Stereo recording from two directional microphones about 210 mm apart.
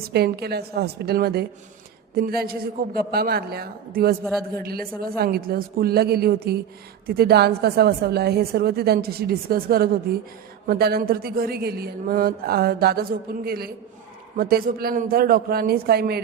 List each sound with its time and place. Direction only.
0.0 s a man's voice: 50° right (ahead or behind)